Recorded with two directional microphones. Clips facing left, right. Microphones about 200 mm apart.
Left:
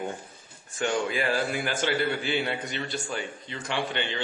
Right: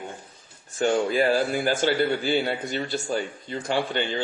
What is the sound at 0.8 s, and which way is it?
A man's voice, 40° right (ahead or behind).